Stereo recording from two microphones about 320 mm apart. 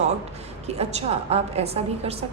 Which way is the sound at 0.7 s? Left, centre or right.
Centre.